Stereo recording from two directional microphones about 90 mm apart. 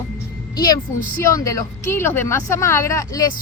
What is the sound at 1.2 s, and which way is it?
Speech, 35° left (ahead or behind).